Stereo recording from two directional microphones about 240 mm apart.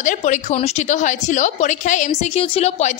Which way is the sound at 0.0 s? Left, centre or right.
Left.